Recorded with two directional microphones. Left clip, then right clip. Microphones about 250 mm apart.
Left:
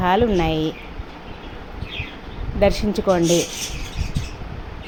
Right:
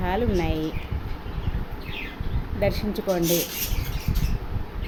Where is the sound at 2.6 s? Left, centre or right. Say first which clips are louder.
Left 7 dB; centre.